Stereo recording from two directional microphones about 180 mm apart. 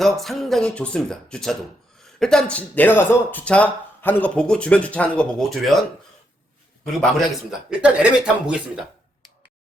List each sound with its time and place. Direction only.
0.0 s speech: centre (ahead or behind)
7.7 s speech: 5° right (ahead or behind)